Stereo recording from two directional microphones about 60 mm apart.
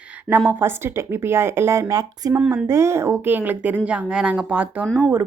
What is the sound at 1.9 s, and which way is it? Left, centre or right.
Speech, right.